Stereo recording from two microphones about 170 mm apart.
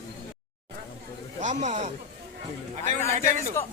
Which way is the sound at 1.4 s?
45° right (ahead or behind).